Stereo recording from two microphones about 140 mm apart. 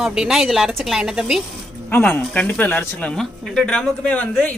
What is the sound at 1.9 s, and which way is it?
Speech, 15° left (ahead or behind).